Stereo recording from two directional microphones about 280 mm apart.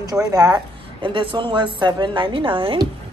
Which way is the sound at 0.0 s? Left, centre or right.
Centre.